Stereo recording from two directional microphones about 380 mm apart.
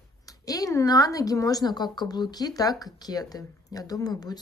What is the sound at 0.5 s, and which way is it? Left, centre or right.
A woman's voice, centre.